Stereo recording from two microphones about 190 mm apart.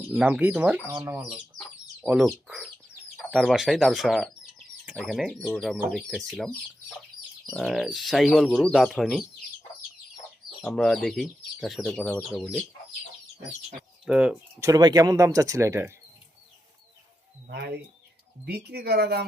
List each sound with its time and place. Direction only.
0.1 s speech: 10° right (ahead or behind)
7.5 s speech: centre (ahead or behind)
10.6 s speech: centre (ahead or behind)
14.0 s speech: 5° right (ahead or behind)
14.7 s speech: 20° right (ahead or behind)
17.5 s speech: 60° right (ahead or behind)